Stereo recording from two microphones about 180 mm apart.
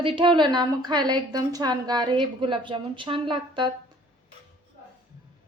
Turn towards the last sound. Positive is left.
turn(degrees=-25)  # may be behind; listen again after turning